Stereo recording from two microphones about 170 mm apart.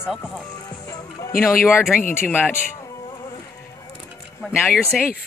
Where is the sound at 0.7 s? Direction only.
25° left (ahead or behind).